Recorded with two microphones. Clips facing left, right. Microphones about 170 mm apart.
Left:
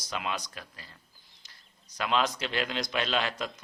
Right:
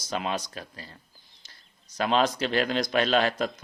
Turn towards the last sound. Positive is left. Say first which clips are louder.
# right 7 dB
turn(degrees=-45)  # may be behind; listen again after turning